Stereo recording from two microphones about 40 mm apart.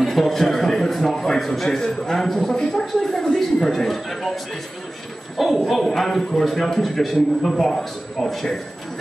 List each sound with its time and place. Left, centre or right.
0.0 s a man's voice: centre
2.5 s speech: centre
5.4 s a man's voice: centre